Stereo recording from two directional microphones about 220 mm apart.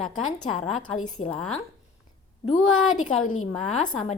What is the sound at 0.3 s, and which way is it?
Speech, 20° left (ahead or behind).